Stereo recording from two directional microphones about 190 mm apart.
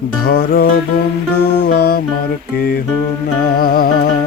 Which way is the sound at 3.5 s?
50° left (ahead or behind).